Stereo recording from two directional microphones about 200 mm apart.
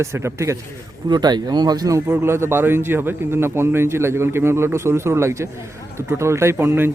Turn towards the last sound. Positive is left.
turn(degrees=-10)  # may be behind; listen again after turning